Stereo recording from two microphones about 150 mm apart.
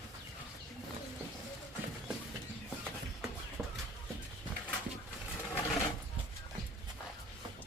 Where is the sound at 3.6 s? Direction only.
15° right (ahead or behind).